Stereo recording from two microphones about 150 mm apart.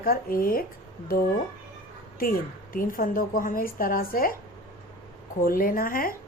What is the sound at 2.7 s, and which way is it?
Speech, 70° left (ahead or behind).